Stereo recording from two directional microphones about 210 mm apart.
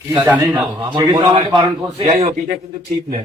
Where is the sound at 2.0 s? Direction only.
30° right (ahead or behind).